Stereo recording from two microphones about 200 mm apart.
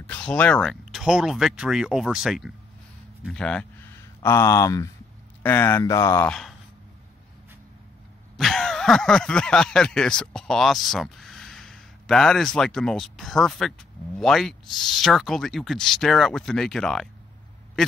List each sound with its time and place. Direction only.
0.0 s speech: 5° left (ahead or behind)
8.4 s speech: centre (ahead or behind)
17.8 s quack: centre (ahead or behind)